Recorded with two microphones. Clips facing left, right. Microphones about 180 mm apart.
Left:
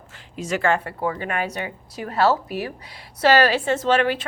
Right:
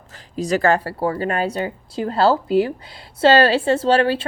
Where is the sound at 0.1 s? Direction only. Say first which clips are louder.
Right 6 dB; 35° right (ahead or behind).